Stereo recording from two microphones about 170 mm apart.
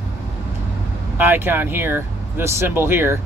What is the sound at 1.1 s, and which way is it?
Speech, 10° right (ahead or behind).